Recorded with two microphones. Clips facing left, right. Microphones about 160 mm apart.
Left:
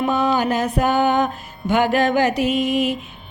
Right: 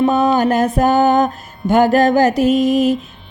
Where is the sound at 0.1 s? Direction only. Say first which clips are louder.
Right 5 dB; 45° right (ahead or behind).